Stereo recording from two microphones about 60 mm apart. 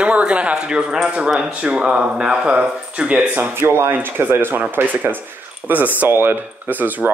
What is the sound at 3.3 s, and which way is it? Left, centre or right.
Speech, right.